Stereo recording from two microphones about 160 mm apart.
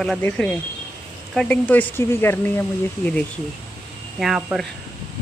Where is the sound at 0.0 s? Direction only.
5° left (ahead or behind).